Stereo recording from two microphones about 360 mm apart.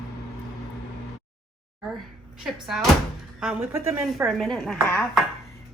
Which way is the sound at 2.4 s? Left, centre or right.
Centre.